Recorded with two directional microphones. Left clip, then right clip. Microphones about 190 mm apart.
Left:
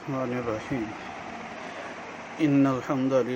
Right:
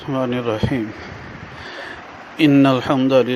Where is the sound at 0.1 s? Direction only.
40° right (ahead or behind).